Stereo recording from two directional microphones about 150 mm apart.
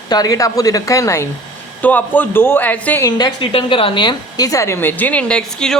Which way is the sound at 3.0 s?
30° left (ahead or behind).